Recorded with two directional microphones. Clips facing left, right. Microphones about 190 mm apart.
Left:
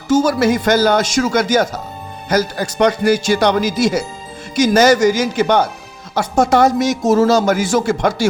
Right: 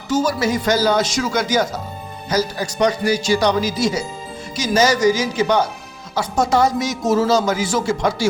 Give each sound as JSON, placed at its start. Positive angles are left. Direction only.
{"t": 0.1, "sound": "a man's voice", "side_deg": 50}